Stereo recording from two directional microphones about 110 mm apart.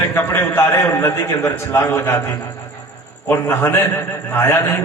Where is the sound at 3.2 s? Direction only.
20° left (ahead or behind).